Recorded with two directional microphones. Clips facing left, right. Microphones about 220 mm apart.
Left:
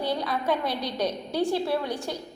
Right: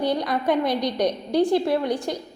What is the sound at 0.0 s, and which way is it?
A woman's voice, 15° right (ahead or behind).